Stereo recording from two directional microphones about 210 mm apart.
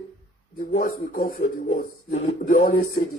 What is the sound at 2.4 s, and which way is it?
Speech, 40° left (ahead or behind).